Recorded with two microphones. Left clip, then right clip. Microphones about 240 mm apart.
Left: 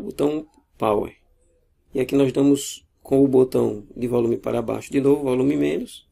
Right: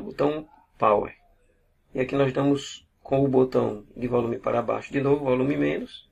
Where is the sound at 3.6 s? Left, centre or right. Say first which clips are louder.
Left 4 dB; left.